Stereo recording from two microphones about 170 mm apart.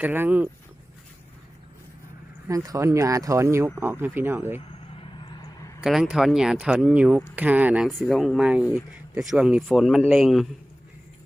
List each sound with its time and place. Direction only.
0.0 s speech: 10° right (ahead or behind)
2.5 s speech: 20° right (ahead or behind)
5.8 s speech: 5° right (ahead or behind)